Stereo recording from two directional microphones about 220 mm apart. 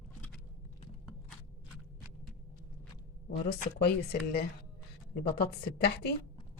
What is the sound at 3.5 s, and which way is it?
Speech, 50° left (ahead or behind).